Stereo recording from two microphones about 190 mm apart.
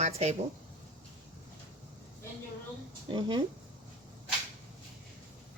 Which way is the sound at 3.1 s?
25° right (ahead or behind).